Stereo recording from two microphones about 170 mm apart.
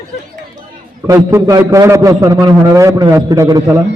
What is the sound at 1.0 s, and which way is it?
A man's voice, 20° right (ahead or behind).